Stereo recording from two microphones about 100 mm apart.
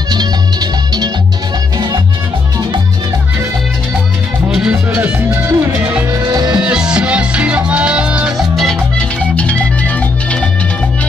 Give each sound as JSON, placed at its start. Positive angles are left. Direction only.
{"t": 0.1, "sound": "music", "side_deg": -45}
{"t": 4.5, "sound": "music", "side_deg": -5}
{"t": 5.0, "sound": "music", "side_deg": -20}
{"t": 6.1, "sound": "music", "side_deg": -45}
{"t": 6.6, "sound": "music", "side_deg": -10}
{"t": 8.5, "sound": "music", "side_deg": 0}
{"t": 9.3, "sound": "music", "side_deg": 15}